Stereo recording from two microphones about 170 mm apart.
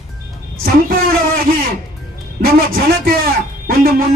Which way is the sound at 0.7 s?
60° right (ahead or behind).